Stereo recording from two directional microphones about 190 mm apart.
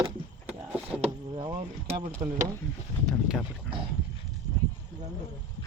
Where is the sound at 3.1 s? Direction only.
Centre (ahead or behind).